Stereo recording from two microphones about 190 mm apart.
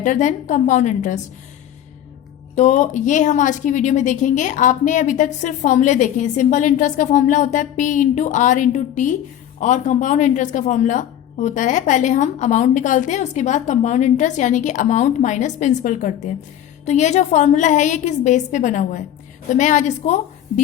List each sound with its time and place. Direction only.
0.0 s a woman's voice: 40° left (ahead or behind)
2.6 s a woman's voice: 40° left (ahead or behind)